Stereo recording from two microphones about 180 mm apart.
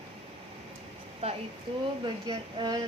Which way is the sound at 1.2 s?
35° right (ahead or behind).